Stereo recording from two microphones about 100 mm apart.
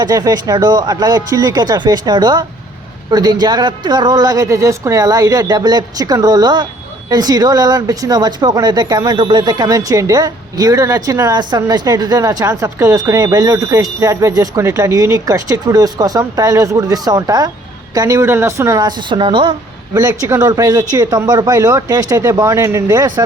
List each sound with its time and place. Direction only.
0.0 s speech: 40° right (ahead or behind)
11.3 s speech: 45° right (ahead or behind)
18.9 s a woman's voice: 55° right (ahead or behind)
19.9 s speech: 30° right (ahead or behind)